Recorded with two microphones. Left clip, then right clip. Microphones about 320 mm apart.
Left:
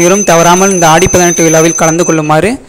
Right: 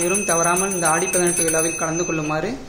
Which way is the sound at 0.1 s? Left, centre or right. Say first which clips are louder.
Left 14 dB; left.